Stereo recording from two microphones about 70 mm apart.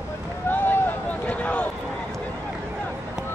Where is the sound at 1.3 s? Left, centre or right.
Left.